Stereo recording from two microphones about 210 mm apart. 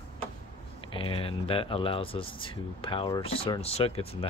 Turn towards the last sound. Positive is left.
turn(degrees=25)  # may be behind; listen again after turning